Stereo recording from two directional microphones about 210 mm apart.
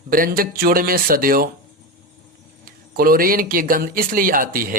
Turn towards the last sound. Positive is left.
turn(degrees=-40)  # may be behind; listen again after turning